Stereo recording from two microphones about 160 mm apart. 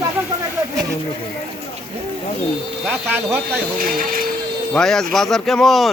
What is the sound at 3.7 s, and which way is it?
Speech, 60° right (ahead or behind).